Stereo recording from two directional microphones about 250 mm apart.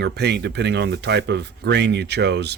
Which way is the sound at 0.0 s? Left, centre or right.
Right.